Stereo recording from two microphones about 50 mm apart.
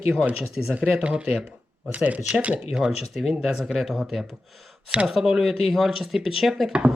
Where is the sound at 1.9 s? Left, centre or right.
Right.